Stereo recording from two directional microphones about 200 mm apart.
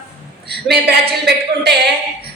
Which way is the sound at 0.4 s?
55° right (ahead or behind).